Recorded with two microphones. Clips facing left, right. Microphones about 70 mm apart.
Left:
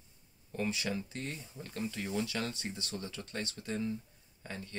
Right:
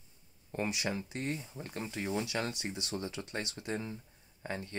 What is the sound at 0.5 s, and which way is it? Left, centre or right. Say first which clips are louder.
Speech: even; right.